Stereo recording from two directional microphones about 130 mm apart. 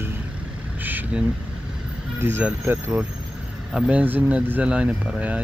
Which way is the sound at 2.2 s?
15° right (ahead or behind).